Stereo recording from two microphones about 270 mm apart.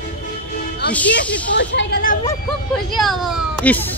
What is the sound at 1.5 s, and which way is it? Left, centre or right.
Speech, left.